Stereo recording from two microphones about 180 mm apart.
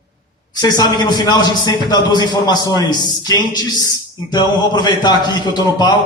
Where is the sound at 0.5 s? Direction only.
20° left (ahead or behind).